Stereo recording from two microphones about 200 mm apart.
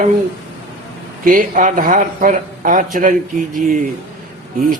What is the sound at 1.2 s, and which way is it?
A man's voice, 40° right (ahead or behind).